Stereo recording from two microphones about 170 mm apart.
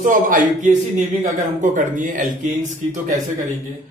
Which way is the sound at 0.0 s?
50° right (ahead or behind).